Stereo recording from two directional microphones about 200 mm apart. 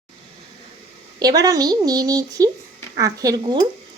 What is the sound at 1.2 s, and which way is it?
Speech, 20° right (ahead or behind).